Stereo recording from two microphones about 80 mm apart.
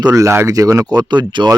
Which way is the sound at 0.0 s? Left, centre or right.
Right.